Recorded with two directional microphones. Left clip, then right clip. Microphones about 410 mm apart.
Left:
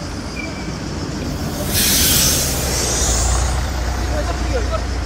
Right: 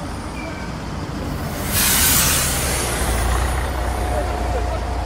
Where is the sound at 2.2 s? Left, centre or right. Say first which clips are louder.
Left 1 dB; right.